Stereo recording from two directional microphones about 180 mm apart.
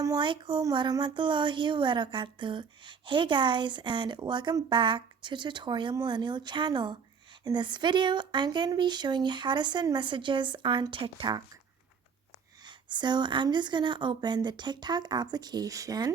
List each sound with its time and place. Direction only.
0.0 s speech: 25° right (ahead or behind)
12.6 s speech: 25° right (ahead or behind)